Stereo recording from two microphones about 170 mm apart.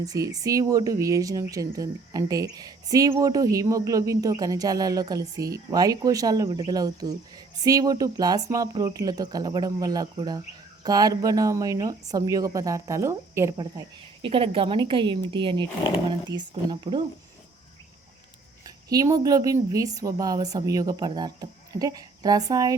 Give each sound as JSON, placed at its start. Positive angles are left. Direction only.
{"t": 0.0, "sound": "speech", "side_deg": -20}
{"t": 18.9, "sound": "speech", "side_deg": -20}